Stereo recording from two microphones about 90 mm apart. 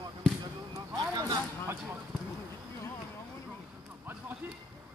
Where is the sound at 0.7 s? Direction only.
45° right (ahead or behind).